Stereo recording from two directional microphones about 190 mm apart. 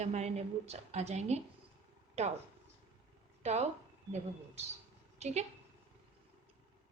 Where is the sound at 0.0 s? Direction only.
35° right (ahead or behind).